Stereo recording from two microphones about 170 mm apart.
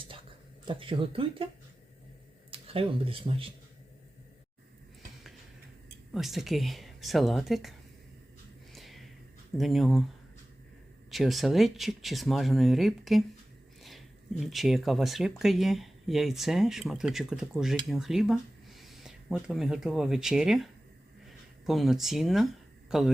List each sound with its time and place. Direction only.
0.6 s speech: 30° right (ahead or behind)
2.5 s speech: 35° right (ahead or behind)
6.1 s speech: centre (ahead or behind)
8.7 s a sound: centre (ahead or behind)
9.6 s speech: centre (ahead or behind)
11.1 s speech: centre (ahead or behind)